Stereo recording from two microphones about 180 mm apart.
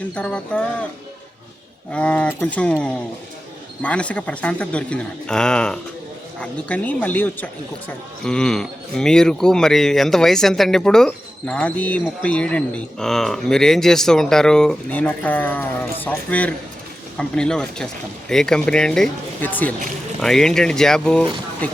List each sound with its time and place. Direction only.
0.1 s speech: 5° left (ahead or behind)
1.9 s speech: 5° left (ahead or behind)